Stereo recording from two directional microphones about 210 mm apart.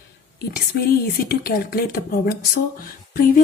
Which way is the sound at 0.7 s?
50° left (ahead or behind).